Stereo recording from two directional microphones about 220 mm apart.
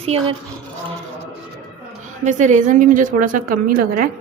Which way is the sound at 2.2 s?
35° right (ahead or behind).